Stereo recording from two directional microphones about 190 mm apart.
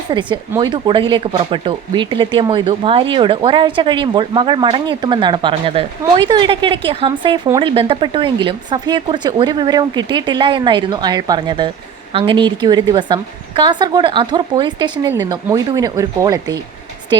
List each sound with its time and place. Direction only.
0.1 s speech: 25° right (ahead or behind)